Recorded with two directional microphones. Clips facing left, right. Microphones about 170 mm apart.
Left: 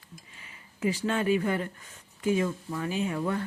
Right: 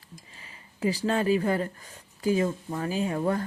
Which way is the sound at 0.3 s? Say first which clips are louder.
Right 3 dB; 35° right (ahead or behind).